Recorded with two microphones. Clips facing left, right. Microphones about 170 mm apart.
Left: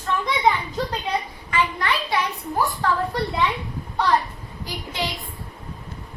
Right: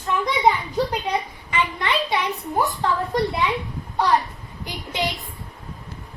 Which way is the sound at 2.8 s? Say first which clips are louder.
Left 2 dB; 20° right (ahead or behind).